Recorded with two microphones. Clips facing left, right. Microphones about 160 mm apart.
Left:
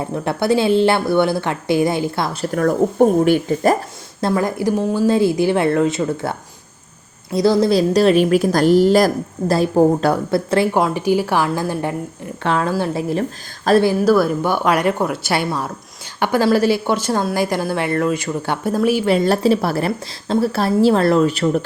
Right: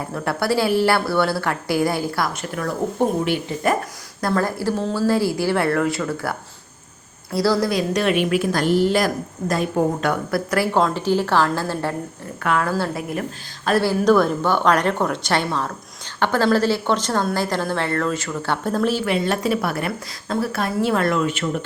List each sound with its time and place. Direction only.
0.0 s a woman's voice: 20° left (ahead or behind)
4.2 s a woman's voice: 20° left (ahead or behind)
10.8 s speech: 10° left (ahead or behind)
12.4 s a woman's voice: 25° left (ahead or behind)
14.0 s speech: 5° left (ahead or behind)
19.0 s a woman's voice: 40° left (ahead or behind)